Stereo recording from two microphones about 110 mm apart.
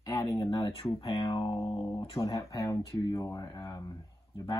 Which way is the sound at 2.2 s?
30° left (ahead or behind).